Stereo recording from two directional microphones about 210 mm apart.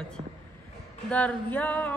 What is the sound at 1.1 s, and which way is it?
Music, 5° left (ahead or behind).